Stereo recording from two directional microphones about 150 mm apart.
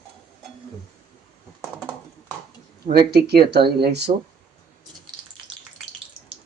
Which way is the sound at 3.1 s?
90° right.